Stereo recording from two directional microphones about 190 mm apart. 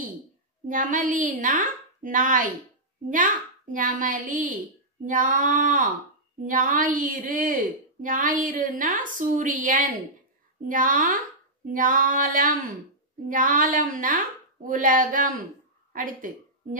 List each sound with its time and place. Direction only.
0.7 s a woman's voice: 45° right (ahead or behind)